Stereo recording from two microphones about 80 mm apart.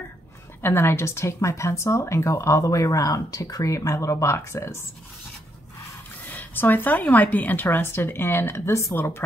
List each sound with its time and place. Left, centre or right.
0.6 s speech: left
6.2 s speech: left